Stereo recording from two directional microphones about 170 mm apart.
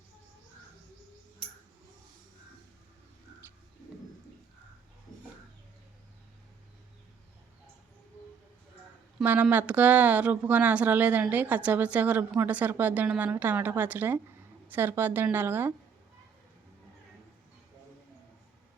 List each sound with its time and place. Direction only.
9.1 s speech: 10° right (ahead or behind)